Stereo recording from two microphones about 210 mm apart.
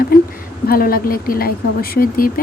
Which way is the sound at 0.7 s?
45° left (ahead or behind).